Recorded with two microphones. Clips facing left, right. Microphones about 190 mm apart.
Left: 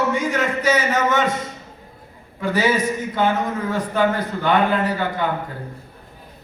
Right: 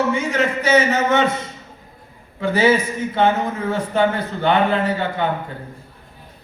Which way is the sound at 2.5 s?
25° right (ahead or behind).